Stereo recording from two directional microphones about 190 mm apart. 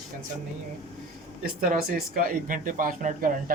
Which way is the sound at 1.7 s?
45° right (ahead or behind).